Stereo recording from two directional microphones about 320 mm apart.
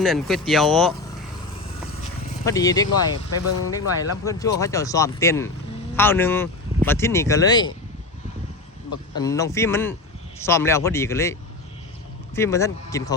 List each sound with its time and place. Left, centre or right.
0.0 s speech: centre
2.4 s speech: centre
2.8 s speech: left
4.3 s speech: centre
9.1 s speech: centre